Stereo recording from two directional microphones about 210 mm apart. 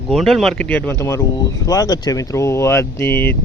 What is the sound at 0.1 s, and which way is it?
Speech, centre (ahead or behind).